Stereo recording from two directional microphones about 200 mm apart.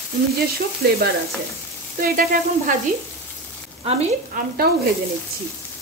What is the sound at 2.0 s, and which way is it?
Speech, 45° right (ahead or behind).